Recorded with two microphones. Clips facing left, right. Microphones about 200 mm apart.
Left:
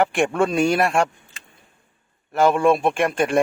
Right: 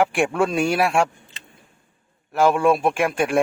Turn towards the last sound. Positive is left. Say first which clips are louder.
# left 1 dB
turn(degrees=0)  # may be behind; listen again after turning